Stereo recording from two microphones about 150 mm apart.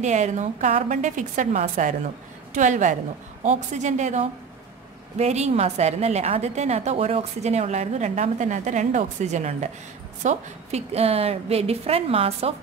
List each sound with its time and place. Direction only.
0.0 s a woman's voice: 50° right (ahead or behind)